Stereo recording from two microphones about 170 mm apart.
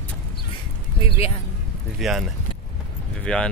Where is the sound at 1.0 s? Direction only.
35° left (ahead or behind).